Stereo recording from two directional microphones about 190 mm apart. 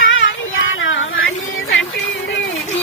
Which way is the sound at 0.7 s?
90° left.